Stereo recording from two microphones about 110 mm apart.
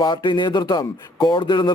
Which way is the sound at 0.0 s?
45° left (ahead or behind).